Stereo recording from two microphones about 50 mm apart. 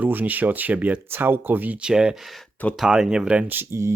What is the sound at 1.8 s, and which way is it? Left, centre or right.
Speech, centre.